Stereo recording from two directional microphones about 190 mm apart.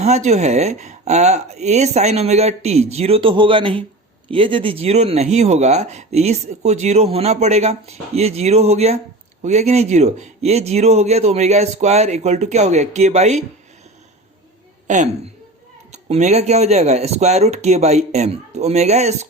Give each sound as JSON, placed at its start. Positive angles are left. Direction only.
{"t": 0.0, "sound": "speech", "side_deg": -35}
{"t": 14.8, "sound": "a woman's voice", "side_deg": -40}